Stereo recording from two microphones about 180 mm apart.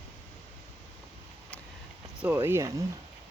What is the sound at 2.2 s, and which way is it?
Speech, 15° right (ahead or behind).